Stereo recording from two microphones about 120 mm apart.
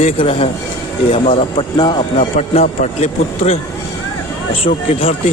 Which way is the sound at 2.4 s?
70° left (ahead or behind).